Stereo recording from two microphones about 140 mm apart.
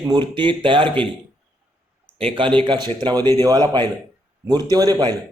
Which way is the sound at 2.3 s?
35° right (ahead or behind).